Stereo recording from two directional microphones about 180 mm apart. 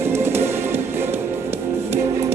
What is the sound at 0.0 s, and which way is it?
Music, 15° right (ahead or behind).